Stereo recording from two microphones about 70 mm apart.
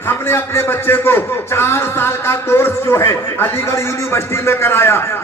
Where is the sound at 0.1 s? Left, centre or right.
Left.